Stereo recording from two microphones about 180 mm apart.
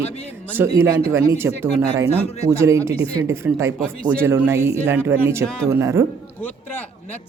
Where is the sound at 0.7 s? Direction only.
15° right (ahead or behind).